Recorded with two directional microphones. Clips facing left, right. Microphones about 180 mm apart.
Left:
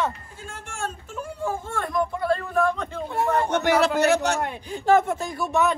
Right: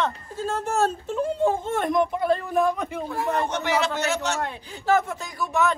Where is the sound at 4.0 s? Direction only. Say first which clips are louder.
Left 6 dB; 60° left (ahead or behind).